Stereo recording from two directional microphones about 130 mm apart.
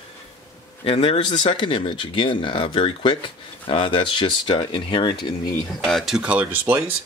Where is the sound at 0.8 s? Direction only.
50° left (ahead or behind).